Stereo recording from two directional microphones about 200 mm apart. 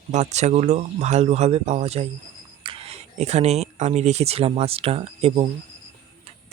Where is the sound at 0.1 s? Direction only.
35° right (ahead or behind).